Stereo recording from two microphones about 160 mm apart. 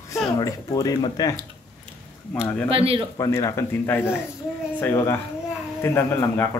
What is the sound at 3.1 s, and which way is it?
Speech, 20° left (ahead or behind).